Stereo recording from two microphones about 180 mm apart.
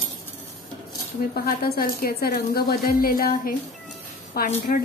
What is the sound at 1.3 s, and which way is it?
A woman's voice, 55° left (ahead or behind).